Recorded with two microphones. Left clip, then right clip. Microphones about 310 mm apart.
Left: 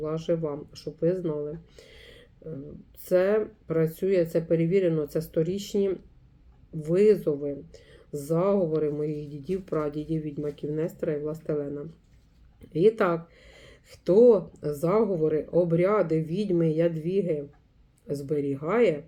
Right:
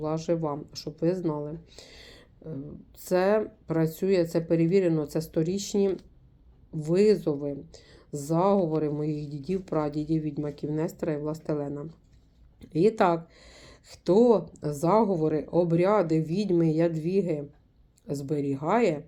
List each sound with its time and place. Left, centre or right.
0.0 s speech: centre